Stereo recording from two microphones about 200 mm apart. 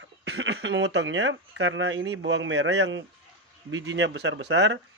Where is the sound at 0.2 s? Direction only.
60° right (ahead or behind).